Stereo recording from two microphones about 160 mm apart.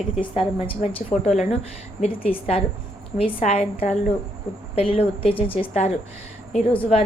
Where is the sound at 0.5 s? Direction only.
35° left (ahead or behind).